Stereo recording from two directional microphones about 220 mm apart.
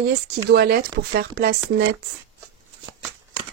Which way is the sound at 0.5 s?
45° right (ahead or behind).